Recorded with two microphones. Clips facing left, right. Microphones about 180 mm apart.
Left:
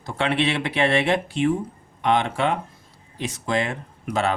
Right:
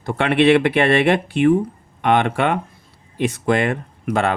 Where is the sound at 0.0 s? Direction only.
60° right (ahead or behind).